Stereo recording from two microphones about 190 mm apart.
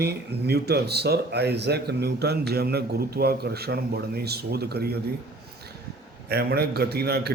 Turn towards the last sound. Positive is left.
turn(degrees=-55)  # may be behind; listen again after turning